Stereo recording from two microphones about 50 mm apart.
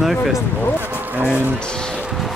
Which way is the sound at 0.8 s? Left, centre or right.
Right.